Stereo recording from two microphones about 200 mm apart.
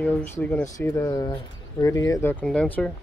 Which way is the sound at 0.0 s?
5° left (ahead or behind).